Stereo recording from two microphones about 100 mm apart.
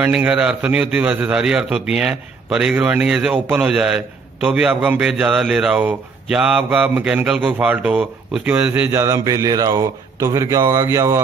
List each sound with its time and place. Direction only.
0.0 s a man's voice: 10° right (ahead or behind)
9.1 s speech: 35° right (ahead or behind)